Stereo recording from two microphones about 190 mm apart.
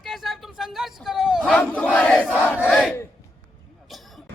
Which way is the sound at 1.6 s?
5° left (ahead or behind).